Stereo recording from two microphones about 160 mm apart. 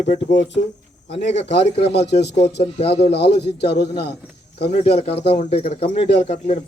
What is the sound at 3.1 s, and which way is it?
Speech, 90° left.